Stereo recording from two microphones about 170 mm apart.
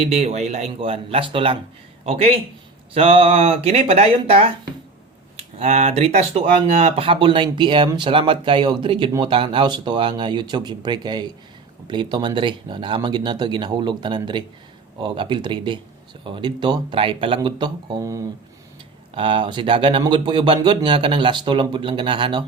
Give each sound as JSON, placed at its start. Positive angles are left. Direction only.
{"t": 0.0, "sound": "speech", "side_deg": -35}